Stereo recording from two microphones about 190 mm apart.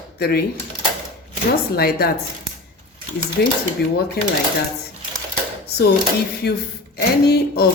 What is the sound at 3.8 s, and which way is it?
Speech, 55° left (ahead or behind).